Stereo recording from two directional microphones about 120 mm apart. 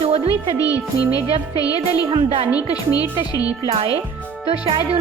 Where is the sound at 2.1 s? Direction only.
50° right (ahead or behind).